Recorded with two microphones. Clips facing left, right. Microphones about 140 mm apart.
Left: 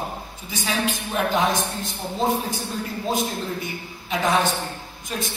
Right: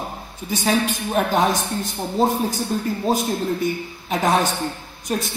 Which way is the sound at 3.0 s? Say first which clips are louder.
Right 4 dB; 45° right (ahead or behind).